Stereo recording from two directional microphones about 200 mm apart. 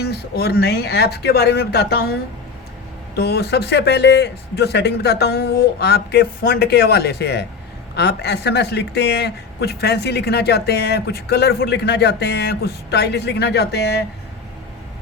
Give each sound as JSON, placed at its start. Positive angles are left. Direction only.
{"t": 0.0, "sound": "speech", "side_deg": 55}
{"t": 3.2, "sound": "speech", "side_deg": 55}